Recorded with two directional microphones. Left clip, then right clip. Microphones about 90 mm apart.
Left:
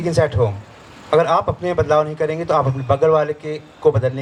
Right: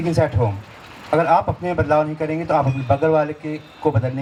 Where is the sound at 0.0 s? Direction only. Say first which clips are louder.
Left 2 dB; 35° left (ahead or behind).